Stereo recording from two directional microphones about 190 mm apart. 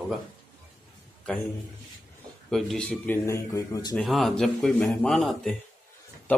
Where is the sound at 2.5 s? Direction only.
Centre (ahead or behind); by 3.9 s 20° left (ahead or behind).